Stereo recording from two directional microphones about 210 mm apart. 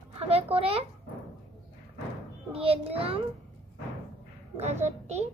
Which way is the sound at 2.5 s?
25° right (ahead or behind).